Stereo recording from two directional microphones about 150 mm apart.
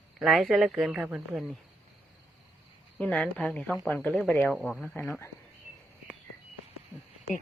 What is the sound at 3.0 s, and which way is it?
Speech, 10° left (ahead or behind).